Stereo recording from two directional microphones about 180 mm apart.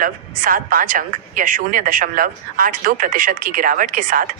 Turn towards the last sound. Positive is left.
turn(degrees=-50)  # may be behind; listen again after turning